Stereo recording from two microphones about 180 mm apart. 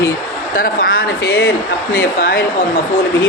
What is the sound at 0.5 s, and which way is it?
Speech, 55° left (ahead or behind).